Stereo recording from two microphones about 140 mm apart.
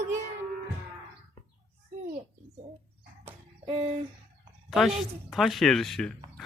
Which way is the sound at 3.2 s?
40° right (ahead or behind).